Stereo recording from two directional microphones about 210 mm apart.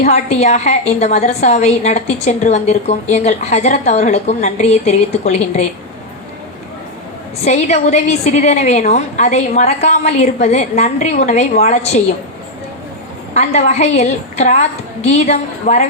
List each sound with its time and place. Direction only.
0.0 s a woman's voice: 30° left (ahead or behind)
7.4 s a woman's voice: 30° left (ahead or behind)
13.3 s a woman's voice: 30° left (ahead or behind)